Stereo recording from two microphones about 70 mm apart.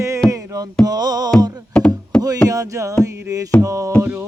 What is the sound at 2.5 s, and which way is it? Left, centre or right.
Music, right.